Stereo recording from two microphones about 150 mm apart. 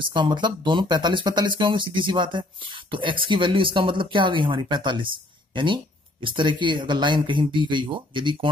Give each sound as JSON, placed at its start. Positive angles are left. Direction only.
{"t": 0.0, "sound": "speech", "side_deg": -30}